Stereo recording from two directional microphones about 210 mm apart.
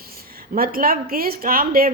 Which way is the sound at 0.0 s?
45° right (ahead or behind).